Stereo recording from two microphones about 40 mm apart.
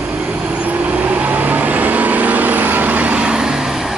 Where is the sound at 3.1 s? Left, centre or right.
Right.